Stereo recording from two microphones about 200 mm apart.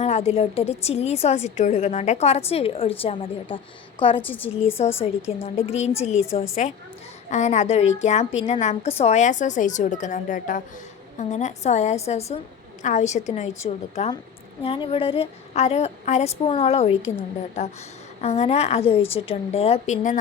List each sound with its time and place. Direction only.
0.0 s a woman's voice: 30° left (ahead or behind)
4.2 s a woman's voice: 10° left (ahead or behind)
5.5 s a woman's voice: 30° left (ahead or behind)
18.2 s a woman's voice: 30° left (ahead or behind)